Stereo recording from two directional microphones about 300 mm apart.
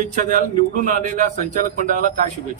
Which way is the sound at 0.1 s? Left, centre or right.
Right.